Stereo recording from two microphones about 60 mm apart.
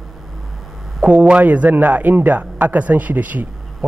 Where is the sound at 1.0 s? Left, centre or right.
Right.